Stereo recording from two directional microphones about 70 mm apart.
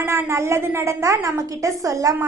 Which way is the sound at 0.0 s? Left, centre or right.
Right.